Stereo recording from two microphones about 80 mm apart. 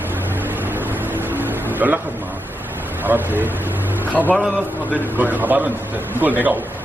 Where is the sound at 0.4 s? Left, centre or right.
Right.